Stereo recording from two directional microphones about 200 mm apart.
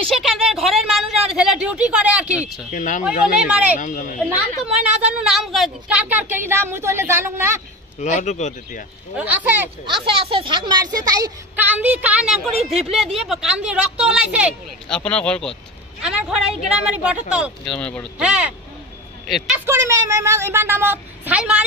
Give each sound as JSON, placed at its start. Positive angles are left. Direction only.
{"t": 0.4, "sound": "a sound", "side_deg": 0}
{"t": 2.7, "sound": "speech", "side_deg": 40}
{"t": 3.4, "sound": "a woman's voice", "side_deg": -5}
{"t": 3.8, "sound": "speech", "side_deg": 40}
{"t": 4.8, "sound": "a woman's voice", "side_deg": -5}
{"t": 8.0, "sound": "speech", "side_deg": 35}
{"t": 9.1, "sound": "a woman's voice", "side_deg": -10}
{"t": 9.8, "sound": "speech", "side_deg": -25}
{"t": 11.6, "sound": "a woman's voice", "side_deg": -10}
{"t": 15.0, "sound": "speech", "side_deg": 5}
{"t": 17.7, "sound": "speech", "side_deg": 5}
{"t": 18.2, "sound": "a woman's voice", "side_deg": -5}
{"t": 19.6, "sound": "a woman's voice", "side_deg": -15}